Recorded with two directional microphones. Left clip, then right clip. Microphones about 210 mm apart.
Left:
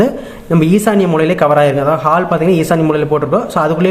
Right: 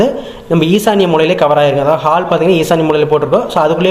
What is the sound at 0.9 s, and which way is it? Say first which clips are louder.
A man's voice: right 4 dB; 15° left (ahead or behind).